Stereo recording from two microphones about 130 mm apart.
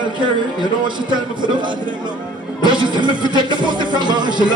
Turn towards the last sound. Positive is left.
turn(degrees=-35)  # may be behind; listen again after turning